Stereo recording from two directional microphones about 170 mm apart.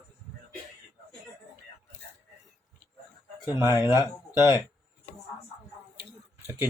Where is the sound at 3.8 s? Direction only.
20° left (ahead or behind).